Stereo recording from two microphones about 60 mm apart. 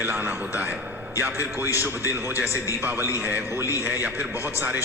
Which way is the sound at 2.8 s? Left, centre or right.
Right.